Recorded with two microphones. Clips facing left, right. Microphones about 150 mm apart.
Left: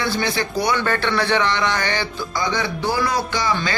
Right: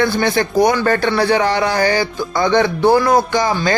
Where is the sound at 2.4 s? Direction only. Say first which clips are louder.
Right 9 dB; 55° right (ahead or behind).